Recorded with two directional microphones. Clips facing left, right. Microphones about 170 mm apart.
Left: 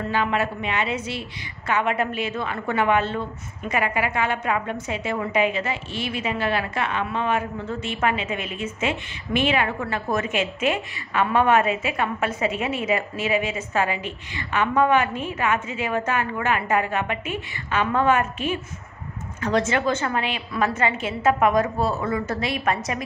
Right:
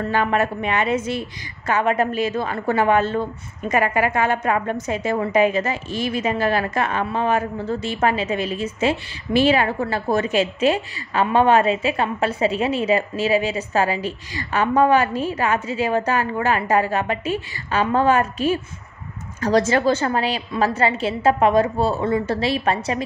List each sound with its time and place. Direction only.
0.1 s a woman's voice: 50° right (ahead or behind); by 23.0 s 30° right (ahead or behind)